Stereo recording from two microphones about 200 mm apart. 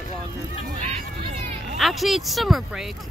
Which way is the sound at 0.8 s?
35° right (ahead or behind).